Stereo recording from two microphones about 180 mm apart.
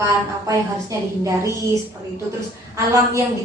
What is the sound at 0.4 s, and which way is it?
A woman's voice, 15° right (ahead or behind).